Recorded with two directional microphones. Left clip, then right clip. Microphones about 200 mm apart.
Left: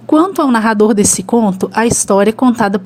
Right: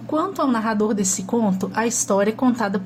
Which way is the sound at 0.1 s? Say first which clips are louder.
Left 10 dB; 40° left (ahead or behind).